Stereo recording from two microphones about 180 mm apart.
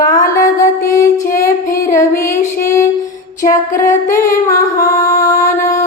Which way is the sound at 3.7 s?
15° left (ahead or behind).